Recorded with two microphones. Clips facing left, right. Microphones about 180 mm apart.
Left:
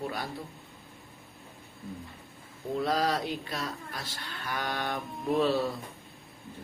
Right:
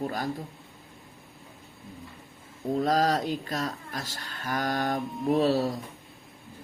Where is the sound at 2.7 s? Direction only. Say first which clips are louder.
Right 4 dB; 45° right (ahead or behind).